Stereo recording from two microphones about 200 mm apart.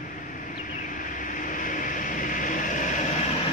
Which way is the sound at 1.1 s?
40° left (ahead or behind).